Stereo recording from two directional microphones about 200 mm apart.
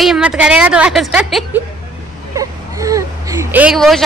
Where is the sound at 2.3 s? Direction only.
15° right (ahead or behind); by 4.0 s centre (ahead or behind).